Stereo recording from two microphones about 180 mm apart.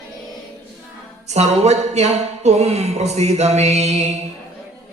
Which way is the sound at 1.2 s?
35° right (ahead or behind).